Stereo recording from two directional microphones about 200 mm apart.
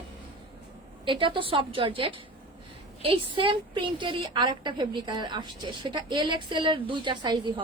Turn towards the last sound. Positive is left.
turn(degrees=-25)  # may be behind; listen again after turning